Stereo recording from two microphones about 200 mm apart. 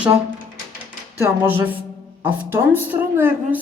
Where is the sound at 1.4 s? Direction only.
10° right (ahead or behind).